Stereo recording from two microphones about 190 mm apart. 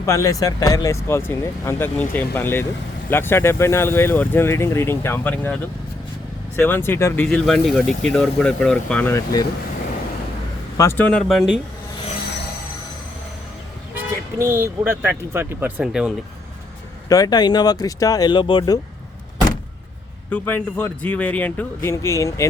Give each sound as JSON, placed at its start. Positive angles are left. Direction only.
{"t": 0.0, "sound": "speech", "side_deg": 15}
{"t": 6.6, "sound": "speech", "side_deg": 10}
{"t": 10.8, "sound": "speech", "side_deg": 10}
{"t": 13.9, "sound": "speech", "side_deg": -15}
{"t": 17.1, "sound": "speech", "side_deg": 20}
{"t": 20.3, "sound": "speech", "side_deg": 10}